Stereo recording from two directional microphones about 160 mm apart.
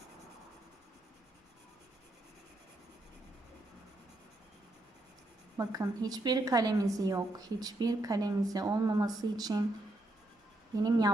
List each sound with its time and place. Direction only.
5.5 s a woman's voice: 25° right (ahead or behind)
10.8 s a woman's voice: 25° right (ahead or behind)